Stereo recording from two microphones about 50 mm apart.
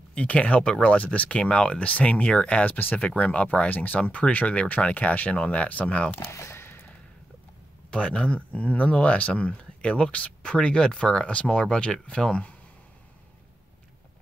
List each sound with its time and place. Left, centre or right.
0.1 s speech: left
1.4 s speech: centre
1.9 s speech: left
6.2 s a sound: left
7.9 s speech: centre